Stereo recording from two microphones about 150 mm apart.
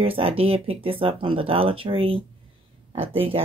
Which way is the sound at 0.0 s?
40° right (ahead or behind).